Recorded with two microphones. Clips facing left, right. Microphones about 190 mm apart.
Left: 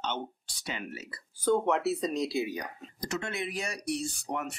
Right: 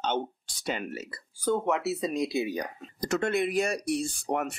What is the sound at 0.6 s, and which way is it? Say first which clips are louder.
Speech: right 6 dB; 45° right (ahead or behind).